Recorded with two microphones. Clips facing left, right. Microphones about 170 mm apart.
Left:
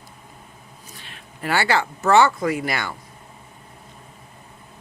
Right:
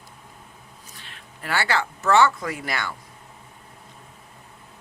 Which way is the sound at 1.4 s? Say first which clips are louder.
Left 4 dB; 15° left (ahead or behind).